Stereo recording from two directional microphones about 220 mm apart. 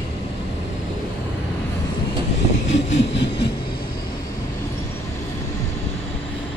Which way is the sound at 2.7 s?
55° left (ahead or behind).